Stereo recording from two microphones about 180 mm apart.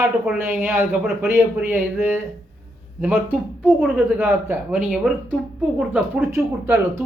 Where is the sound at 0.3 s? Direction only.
15° right (ahead or behind).